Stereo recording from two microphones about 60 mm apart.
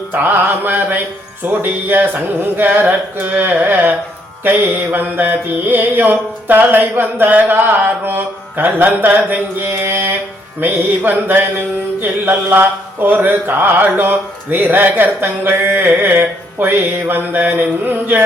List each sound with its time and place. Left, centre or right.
0.1 s mantra: right